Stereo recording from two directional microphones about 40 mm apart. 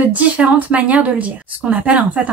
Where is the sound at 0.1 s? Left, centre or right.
Right.